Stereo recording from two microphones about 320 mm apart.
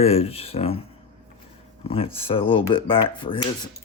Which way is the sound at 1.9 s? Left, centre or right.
Centre.